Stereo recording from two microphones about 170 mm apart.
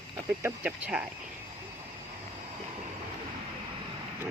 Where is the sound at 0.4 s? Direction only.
5° right (ahead or behind).